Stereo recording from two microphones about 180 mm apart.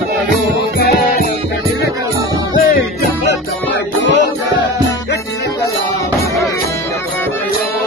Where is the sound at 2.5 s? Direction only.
50° left (ahead or behind).